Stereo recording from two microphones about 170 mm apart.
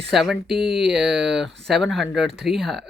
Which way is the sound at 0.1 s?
Centre (ahead or behind).